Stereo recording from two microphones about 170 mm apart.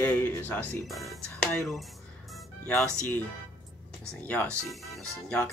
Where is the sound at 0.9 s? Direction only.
Centre (ahead or behind).